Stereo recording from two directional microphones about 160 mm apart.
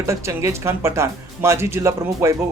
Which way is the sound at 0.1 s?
20° right (ahead or behind).